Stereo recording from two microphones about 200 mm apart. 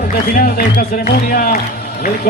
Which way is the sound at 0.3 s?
45° left (ahead or behind).